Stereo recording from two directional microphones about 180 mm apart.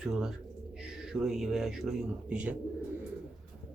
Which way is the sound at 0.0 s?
5° right (ahead or behind).